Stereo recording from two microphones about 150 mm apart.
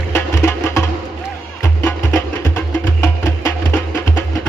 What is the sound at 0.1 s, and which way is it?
Music, 15° left (ahead or behind).